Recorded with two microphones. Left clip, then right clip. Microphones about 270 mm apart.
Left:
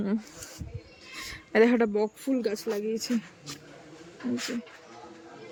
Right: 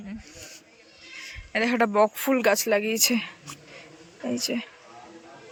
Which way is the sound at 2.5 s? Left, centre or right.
Centre.